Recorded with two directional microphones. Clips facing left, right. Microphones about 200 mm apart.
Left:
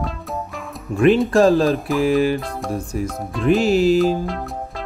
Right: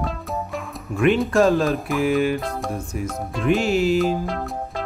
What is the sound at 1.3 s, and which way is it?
Music, 35° left (ahead or behind).